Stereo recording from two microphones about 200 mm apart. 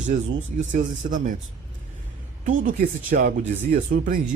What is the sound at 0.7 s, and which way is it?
Speech, 40° right (ahead or behind).